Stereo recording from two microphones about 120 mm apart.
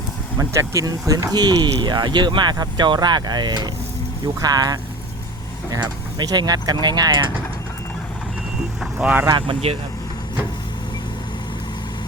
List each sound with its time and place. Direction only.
0.3 s speech: 25° right (ahead or behind)
8.8 s speech: 10° right (ahead or behind)
9.3 s speech: 50° right (ahead or behind)